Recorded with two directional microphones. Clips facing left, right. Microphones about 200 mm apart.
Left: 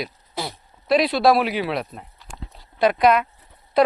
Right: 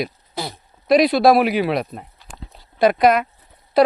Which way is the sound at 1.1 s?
45° right (ahead or behind).